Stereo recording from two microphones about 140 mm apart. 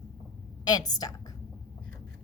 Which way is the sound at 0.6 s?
30° left (ahead or behind).